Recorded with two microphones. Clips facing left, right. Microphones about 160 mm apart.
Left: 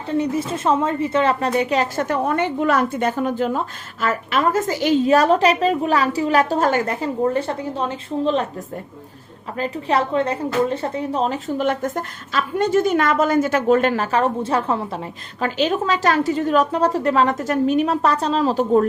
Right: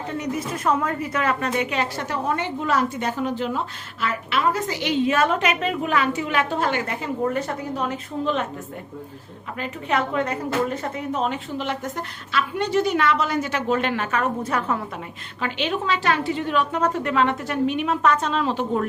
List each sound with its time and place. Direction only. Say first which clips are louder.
0.1 s a woman's voice: left 7 dB; 30° left (ahead or behind)
9.6 s speech: left 4 dB; 35° left (ahead or behind)
15.4 s a woman's voice: left 5 dB; 40° left (ahead or behind)